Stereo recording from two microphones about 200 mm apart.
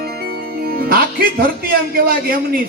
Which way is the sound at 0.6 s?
50° right (ahead or behind).